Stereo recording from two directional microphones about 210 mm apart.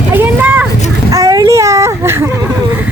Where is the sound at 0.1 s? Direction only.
10° right (ahead or behind).